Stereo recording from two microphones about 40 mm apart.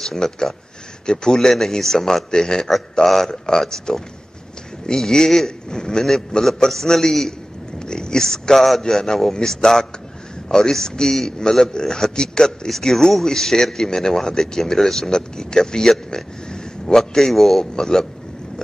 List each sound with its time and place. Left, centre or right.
0.0 s a man's voice: centre
3.3 s a man's voice: centre